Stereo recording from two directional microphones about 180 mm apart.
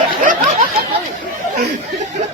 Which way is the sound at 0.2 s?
45° right (ahead or behind).